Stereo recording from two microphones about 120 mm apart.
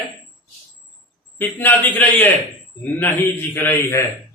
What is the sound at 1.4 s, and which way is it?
Speech, 15° left (ahead or behind).